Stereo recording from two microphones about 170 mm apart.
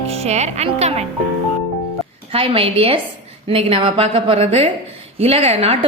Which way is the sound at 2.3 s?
35° right (ahead or behind).